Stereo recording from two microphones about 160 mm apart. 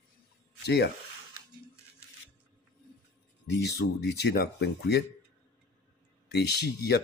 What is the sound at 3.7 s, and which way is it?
Speech, 85° left.